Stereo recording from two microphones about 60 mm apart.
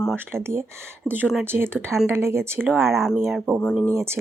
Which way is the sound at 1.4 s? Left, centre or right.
Right.